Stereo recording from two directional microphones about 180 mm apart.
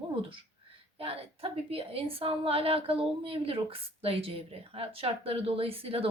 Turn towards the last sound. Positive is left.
turn(degrees=-30)  # may be behind; listen again after turning